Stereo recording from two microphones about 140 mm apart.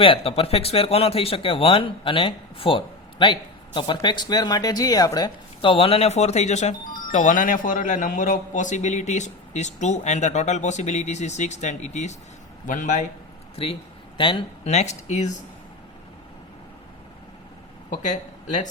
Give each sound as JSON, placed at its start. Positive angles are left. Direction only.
{"t": 0.0, "sound": "speech", "side_deg": 40}
{"t": 5.7, "sound": "speech", "side_deg": 45}
{"t": 14.2, "sound": "speech", "side_deg": 35}
{"t": 14.6, "sound": "speech", "side_deg": 50}
{"t": 17.9, "sound": "speech", "side_deg": 60}